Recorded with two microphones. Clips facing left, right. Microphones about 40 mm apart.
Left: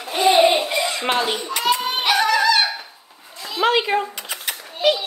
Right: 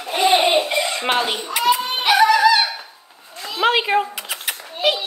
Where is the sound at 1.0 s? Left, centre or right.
Centre.